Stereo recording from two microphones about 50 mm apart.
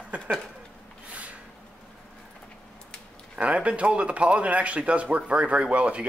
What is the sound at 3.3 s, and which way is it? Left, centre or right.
Speech, right.